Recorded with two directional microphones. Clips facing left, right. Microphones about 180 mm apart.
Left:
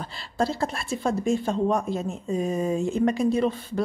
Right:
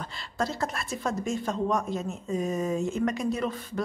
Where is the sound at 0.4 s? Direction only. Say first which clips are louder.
Left 4 dB; 30° left (ahead or behind).